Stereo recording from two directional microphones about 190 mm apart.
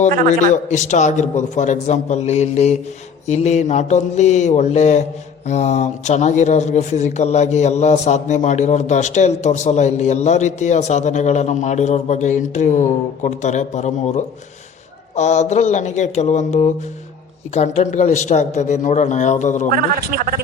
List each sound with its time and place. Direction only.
0.0 s speech: 40° left (ahead or behind)
15.1 s speech: 35° left (ahead or behind)
19.7 s speech: 50° right (ahead or behind)